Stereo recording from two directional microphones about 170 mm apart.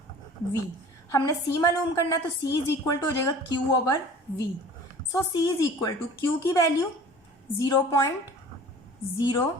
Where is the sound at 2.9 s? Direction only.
25° left (ahead or behind).